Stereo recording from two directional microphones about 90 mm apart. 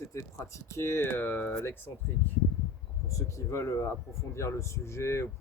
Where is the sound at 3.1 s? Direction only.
35° left (ahead or behind).